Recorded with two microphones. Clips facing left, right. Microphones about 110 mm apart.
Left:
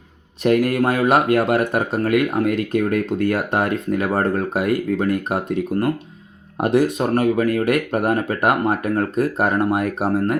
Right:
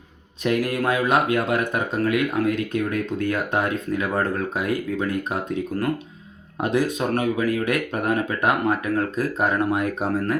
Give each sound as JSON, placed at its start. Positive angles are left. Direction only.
{"t": 0.4, "sound": "speech", "side_deg": 55}
{"t": 7.2, "sound": "speech", "side_deg": 55}